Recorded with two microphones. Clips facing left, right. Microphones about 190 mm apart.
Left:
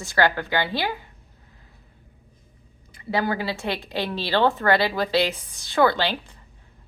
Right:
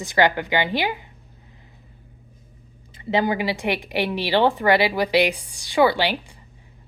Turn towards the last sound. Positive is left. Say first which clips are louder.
# right 2 dB
turn(degrees=-10)  # may be behind; listen again after turning